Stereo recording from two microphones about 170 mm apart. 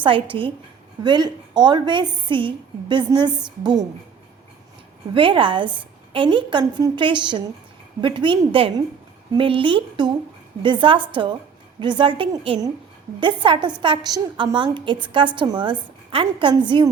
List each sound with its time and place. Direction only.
0.0 s a woman's voice: 30° right (ahead or behind)
5.1 s a woman's voice: 30° right (ahead or behind)